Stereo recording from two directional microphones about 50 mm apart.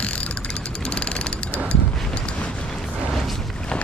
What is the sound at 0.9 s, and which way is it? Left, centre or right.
Vehicle, left.